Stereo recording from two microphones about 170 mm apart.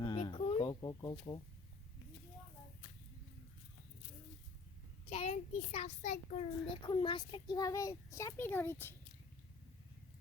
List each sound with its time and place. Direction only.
0.0 s a sound: 25° left (ahead or behind)
1.1 s a child's voice: 35° left (ahead or behind)
5.0 s a child's voice: 40° left (ahead or behind)
6.8 s a child's voice: 30° left (ahead or behind); by 9.0 s 15° left (ahead or behind)